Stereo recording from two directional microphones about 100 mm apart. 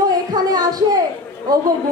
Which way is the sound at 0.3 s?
45° right (ahead or behind).